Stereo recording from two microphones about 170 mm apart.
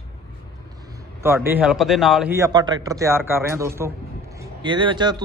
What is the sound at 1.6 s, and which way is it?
Speech, centre (ahead or behind).